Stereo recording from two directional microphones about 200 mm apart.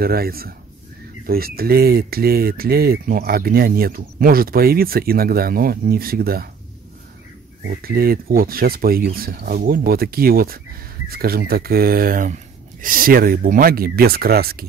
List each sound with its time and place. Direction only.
0.0 s speech: 50° right (ahead or behind)
7.6 s speech: 50° right (ahead or behind)